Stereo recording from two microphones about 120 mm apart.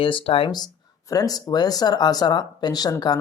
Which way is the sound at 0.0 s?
50° left (ahead or behind).